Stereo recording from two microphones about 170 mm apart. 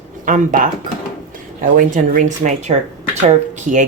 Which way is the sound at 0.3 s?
50° right (ahead or behind).